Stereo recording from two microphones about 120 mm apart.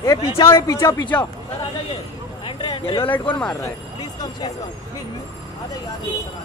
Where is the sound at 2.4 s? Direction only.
45° left (ahead or behind).